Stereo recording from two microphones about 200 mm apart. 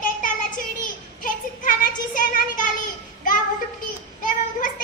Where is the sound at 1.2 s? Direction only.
40° left (ahead or behind).